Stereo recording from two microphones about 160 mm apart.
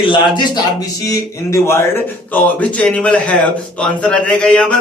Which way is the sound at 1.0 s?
20° left (ahead or behind).